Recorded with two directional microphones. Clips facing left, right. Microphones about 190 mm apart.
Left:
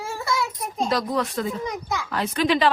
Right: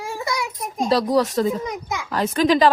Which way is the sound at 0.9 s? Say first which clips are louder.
Right 8 dB; 35° right (ahead or behind).